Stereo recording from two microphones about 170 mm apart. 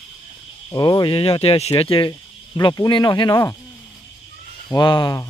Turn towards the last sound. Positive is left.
turn(degrees=25)  # may be behind; listen again after turning